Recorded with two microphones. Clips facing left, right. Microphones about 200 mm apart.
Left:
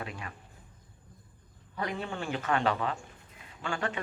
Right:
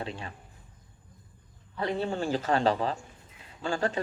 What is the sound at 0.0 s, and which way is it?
Speech, 30° right (ahead or behind).